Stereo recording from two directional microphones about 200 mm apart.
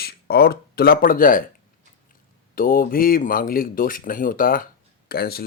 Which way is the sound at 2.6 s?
45° left (ahead or behind).